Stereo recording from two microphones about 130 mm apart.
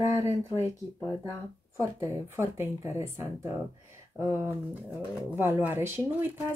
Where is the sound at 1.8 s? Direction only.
20° right (ahead or behind).